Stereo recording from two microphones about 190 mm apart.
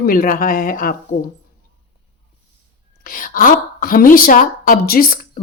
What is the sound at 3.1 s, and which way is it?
A woman's voice, 45° left (ahead or behind).